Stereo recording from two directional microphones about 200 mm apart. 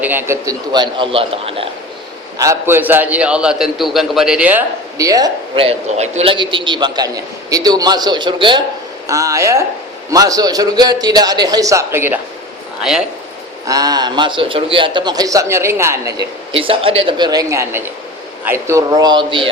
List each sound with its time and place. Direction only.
0.0 s a man's voice: 10° right (ahead or behind); by 1.7 s 30° right (ahead or behind)
2.4 s a man's voice: 15° right (ahead or behind)
13.7 s a man's voice: 20° right (ahead or behind)